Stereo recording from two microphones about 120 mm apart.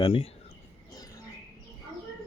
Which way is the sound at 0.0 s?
55° left (ahead or behind).